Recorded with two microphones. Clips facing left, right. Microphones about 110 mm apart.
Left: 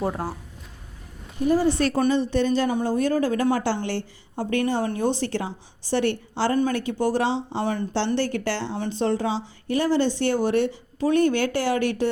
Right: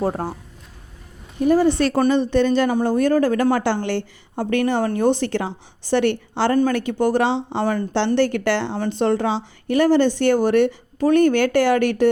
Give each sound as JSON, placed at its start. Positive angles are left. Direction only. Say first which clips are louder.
{"t": 0.0, "sound": "speech", "louder": "right 4 dB", "side_deg": -35}
{"t": 1.5, "sound": "a woman's voice", "louder": "right 4 dB", "side_deg": -65}